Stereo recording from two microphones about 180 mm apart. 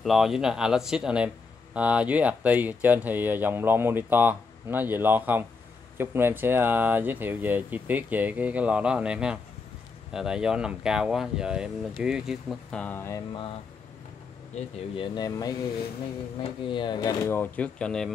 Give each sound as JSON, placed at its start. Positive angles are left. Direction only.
{"t": 0.0, "sound": "speech", "side_deg": 0}
{"t": 14.5, "sound": "speech", "side_deg": 40}
{"t": 15.0, "sound": "speech", "side_deg": 20}